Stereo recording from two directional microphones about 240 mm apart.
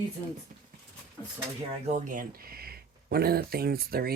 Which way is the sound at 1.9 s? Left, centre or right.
Right.